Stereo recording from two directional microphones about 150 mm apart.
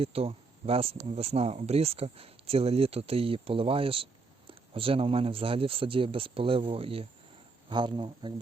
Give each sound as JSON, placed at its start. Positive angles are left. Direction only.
{"t": 0.0, "sound": "speech", "side_deg": -40}